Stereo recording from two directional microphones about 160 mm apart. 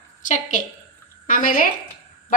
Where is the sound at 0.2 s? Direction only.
50° left (ahead or behind).